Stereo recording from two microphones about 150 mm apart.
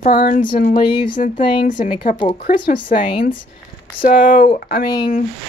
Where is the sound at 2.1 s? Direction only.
60° left (ahead or behind); by 4.9 s 80° left.